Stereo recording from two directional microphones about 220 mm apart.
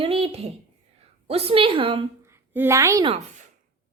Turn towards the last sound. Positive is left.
turn(degrees=-25)  # may be behind; listen again after turning